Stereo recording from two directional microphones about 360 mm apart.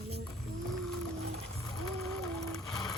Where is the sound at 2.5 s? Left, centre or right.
Centre.